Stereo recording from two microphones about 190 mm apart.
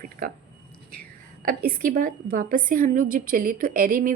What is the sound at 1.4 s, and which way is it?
A woman's voice, 50° right (ahead or behind).